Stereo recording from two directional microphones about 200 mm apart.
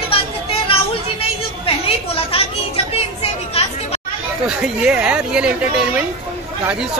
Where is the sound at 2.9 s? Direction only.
30° left (ahead or behind).